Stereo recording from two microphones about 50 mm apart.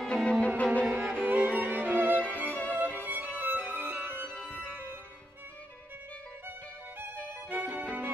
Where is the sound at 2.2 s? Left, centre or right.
Left.